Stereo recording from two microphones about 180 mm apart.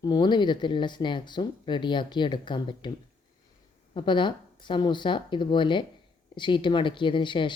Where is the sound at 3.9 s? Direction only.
25° left (ahead or behind).